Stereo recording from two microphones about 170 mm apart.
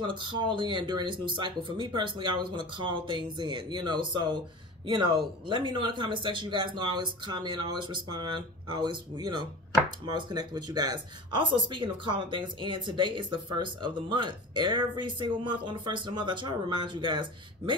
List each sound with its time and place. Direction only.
0.0 s speech: 30° right (ahead or behind)